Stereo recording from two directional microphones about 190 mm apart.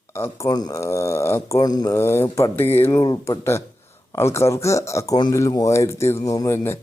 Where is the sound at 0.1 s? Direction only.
15° left (ahead or behind).